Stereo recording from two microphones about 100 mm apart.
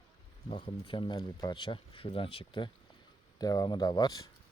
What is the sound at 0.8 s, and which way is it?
Speech, 50° left (ahead or behind).